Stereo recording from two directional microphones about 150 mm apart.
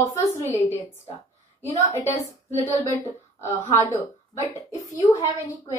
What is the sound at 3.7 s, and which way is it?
A woman's voice, 20° left (ahead or behind).